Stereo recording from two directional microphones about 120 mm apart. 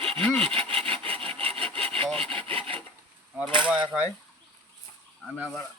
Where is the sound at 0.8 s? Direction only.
50° right (ahead or behind).